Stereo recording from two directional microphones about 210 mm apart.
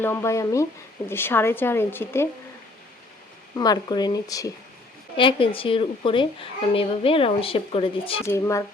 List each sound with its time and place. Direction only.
0.0 s speech: 15° left (ahead or behind)
3.5 s a woman's voice: 20° left (ahead or behind)
8.2 s speech: 15° left (ahead or behind)